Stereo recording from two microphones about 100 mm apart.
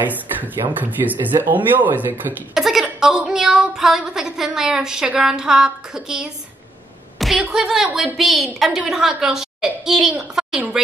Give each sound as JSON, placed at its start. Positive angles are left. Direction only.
{"t": 0.0, "sound": "speech", "side_deg": -15}
{"t": 2.5, "sound": "speech", "side_deg": -5}
{"t": 7.2, "sound": "a sound", "side_deg": 0}
{"t": 7.5, "sound": "a child's voice", "side_deg": -5}